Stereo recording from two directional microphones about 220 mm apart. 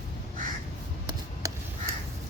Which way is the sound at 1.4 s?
15° right (ahead or behind).